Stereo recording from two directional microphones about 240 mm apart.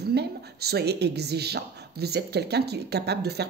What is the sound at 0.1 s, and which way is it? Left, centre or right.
A woman's voice, right.